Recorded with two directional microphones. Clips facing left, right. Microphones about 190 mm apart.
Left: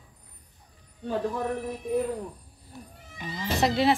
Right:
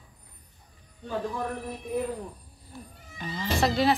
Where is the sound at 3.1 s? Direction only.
10° left (ahead or behind).